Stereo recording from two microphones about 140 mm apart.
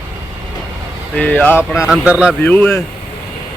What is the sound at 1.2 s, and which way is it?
Speech, 10° left (ahead or behind).